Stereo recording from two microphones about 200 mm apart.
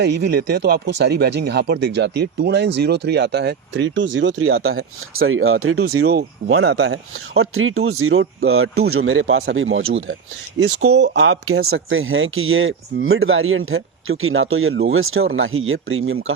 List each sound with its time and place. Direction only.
0.0 s speech: 60° right (ahead or behind); by 6.7 s 90° right
6.7 s speech: 70° right (ahead or behind); by 16.3 s 90° right